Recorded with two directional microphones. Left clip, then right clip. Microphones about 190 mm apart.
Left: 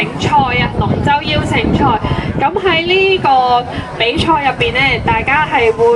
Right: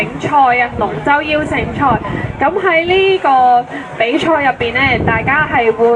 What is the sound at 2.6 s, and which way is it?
Speech, 20° right (ahead or behind).